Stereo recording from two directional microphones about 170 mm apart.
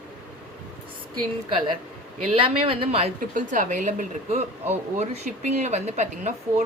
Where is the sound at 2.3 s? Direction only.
30° right (ahead or behind).